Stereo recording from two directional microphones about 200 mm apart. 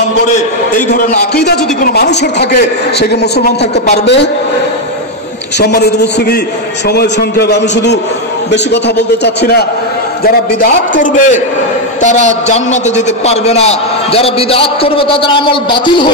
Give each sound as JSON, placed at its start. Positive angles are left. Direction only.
{"t": 0.3, "sound": "a man's voice", "side_deg": 40}
{"t": 5.6, "sound": "a man's voice", "side_deg": 55}